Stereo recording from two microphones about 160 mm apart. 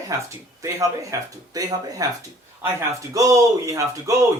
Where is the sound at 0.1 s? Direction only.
20° right (ahead or behind).